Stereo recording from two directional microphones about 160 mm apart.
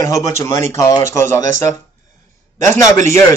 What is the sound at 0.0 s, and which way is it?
Speech, 20° left (ahead or behind).